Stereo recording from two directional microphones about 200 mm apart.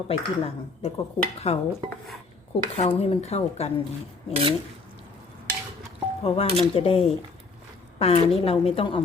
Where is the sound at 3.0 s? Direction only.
30° left (ahead or behind).